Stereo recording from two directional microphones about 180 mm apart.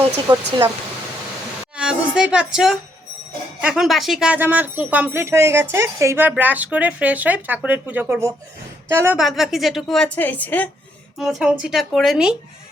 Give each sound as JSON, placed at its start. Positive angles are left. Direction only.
{"t": 0.3, "sound": "speech", "side_deg": -25}
{"t": 1.7, "sound": "a woman's voice", "side_deg": -5}
{"t": 9.1, "sound": "a woman's voice", "side_deg": 0}